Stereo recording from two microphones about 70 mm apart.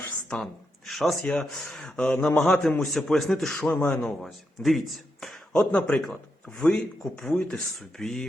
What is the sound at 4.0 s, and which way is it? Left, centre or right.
Speech, centre.